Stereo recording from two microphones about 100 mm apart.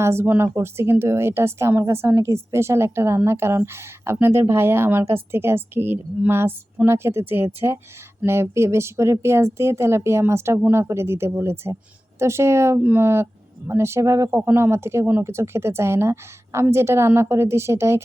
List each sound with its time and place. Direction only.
0.0 s speech: 25° right (ahead or behind)